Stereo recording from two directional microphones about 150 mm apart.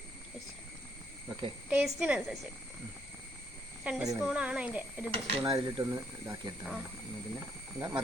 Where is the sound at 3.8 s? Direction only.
10° right (ahead or behind).